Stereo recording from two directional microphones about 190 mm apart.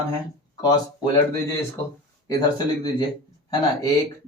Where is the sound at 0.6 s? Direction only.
20° left (ahead or behind).